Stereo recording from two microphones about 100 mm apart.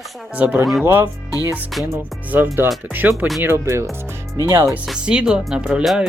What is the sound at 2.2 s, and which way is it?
Speech, 20° right (ahead or behind).